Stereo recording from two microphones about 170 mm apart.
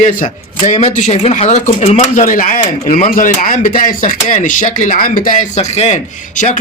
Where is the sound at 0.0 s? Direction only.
45° left (ahead or behind).